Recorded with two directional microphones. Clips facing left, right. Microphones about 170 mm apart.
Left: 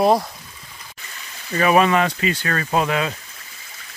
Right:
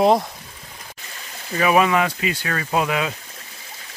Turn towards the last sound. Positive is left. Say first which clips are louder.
# left 1 dB
turn(degrees=-10)  # may be behind; listen again after turning